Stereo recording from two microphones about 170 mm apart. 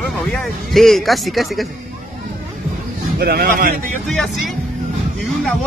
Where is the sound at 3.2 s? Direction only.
65° right (ahead or behind).